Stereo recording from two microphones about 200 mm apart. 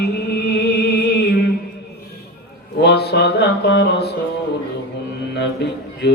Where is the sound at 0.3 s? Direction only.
55° left (ahead or behind).